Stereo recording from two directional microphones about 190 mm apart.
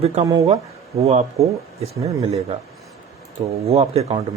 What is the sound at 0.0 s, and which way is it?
Speech, 35° right (ahead or behind).